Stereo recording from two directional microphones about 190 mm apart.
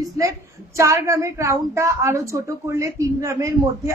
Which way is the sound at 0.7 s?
15° right (ahead or behind).